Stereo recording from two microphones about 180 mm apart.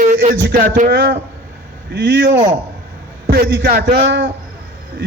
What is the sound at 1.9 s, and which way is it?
A man's voice, 70° right (ahead or behind).